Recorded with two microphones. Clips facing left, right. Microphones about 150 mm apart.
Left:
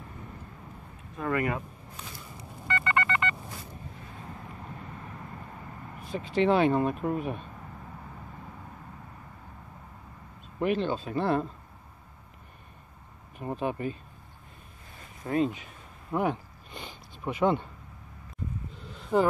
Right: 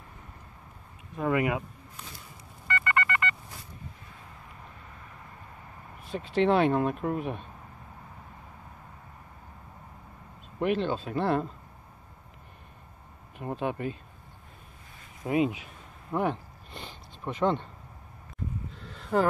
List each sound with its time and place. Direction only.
1.1 s speech: 15° right (ahead or behind)
2.7 s telephone dialing: 20° left (ahead or behind)
6.0 s speech: centre (ahead or behind)
10.6 s speech: centre (ahead or behind)
13.4 s speech: centre (ahead or behind)
15.2 s a sound: 10° right (ahead or behind); by 17.6 s 5° left (ahead or behind)
18.8 s a sound: centre (ahead or behind)